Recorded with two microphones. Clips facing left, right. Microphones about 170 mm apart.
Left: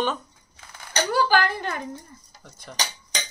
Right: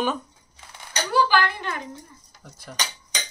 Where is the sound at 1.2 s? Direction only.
45° left (ahead or behind).